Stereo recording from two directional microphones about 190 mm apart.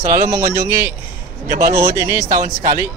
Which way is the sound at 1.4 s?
50° right (ahead or behind).